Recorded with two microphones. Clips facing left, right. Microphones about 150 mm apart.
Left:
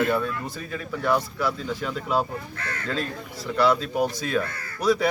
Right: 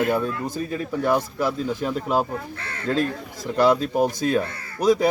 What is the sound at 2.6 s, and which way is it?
Speech, 30° right (ahead or behind).